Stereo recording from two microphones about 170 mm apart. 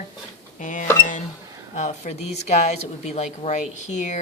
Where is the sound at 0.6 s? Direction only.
50° left (ahead or behind).